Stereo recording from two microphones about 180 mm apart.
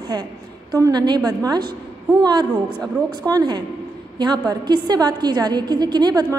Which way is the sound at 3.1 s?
20° right (ahead or behind).